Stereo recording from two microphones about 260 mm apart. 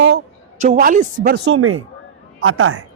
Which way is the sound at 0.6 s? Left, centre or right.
Right.